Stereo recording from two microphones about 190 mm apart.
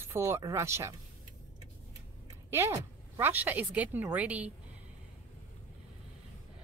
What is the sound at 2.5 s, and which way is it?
A woman's voice, 15° right (ahead or behind).